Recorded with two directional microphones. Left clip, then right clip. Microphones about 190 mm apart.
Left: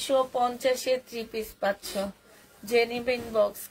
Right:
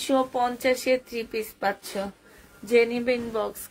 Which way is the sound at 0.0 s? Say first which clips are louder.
Right 1 dB; 45° right (ahead or behind).